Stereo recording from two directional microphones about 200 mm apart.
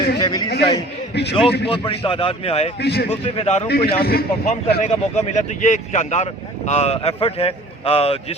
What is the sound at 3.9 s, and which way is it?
Speech, 50° left (ahead or behind).